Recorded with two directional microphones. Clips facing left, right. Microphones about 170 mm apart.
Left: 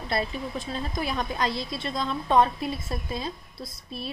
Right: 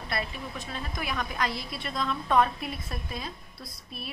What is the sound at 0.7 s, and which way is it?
A woman's voice, 30° left (ahead or behind).